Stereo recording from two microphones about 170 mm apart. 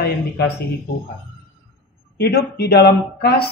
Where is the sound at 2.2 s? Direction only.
75° left (ahead or behind).